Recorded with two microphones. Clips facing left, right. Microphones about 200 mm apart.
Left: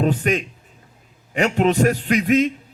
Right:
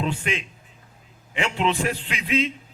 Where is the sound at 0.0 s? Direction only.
45° left (ahead or behind).